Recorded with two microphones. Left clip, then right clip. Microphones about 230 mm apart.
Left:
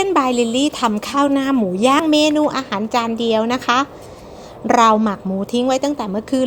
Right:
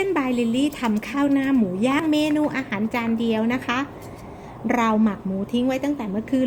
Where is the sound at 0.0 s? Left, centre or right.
Centre.